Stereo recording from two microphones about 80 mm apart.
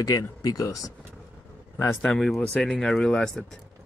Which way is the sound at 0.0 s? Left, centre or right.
Left.